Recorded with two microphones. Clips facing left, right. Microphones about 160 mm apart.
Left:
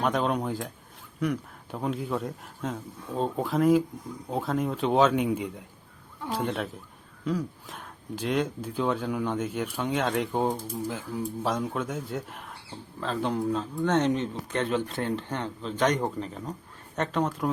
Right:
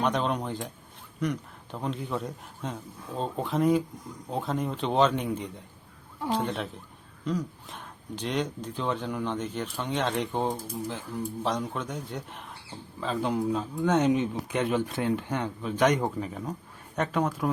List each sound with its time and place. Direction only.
0.0 s speech: 5° left (ahead or behind)